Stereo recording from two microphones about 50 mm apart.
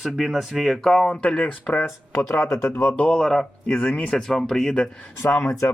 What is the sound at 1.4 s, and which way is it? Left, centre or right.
Speech, left.